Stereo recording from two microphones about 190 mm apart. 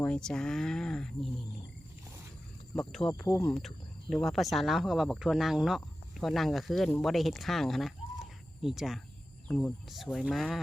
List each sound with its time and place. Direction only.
0.0 s speech: 5° left (ahead or behind)
2.7 s speech: 5° left (ahead or behind)
3.1 s speech: 15° left (ahead or behind)
4.1 s speech: centre (ahead or behind)